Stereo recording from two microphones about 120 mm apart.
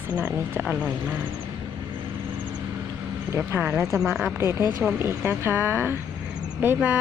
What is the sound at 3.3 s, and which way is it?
Speech, 15° right (ahead or behind).